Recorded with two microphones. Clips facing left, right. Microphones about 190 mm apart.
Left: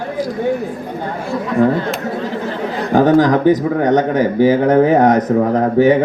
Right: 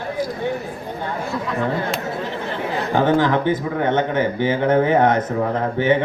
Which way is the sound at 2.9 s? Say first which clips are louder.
Left 6 dB; 40° left (ahead or behind).